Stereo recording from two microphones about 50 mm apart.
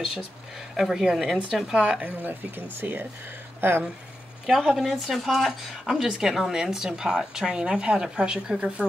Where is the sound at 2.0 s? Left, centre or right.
Right.